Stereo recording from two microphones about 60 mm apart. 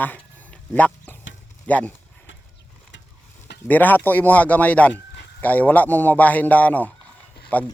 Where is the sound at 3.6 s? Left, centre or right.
Left.